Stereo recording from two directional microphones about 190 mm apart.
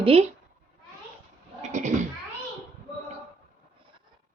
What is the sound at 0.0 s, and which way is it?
Speech, 30° right (ahead or behind).